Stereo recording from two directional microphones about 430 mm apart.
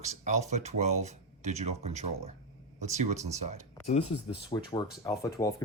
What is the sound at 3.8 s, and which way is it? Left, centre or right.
Speech, centre.